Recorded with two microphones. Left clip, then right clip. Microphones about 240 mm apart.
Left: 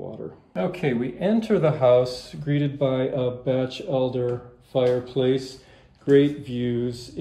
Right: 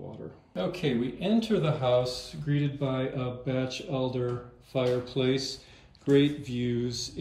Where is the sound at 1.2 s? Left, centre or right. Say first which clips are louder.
Left 8 dB; centre.